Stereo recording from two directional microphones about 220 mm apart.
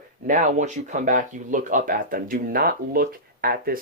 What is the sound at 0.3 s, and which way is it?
Speech, 35° right (ahead or behind).